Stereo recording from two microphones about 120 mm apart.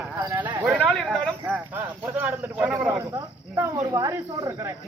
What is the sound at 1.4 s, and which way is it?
Speech, 15° right (ahead or behind).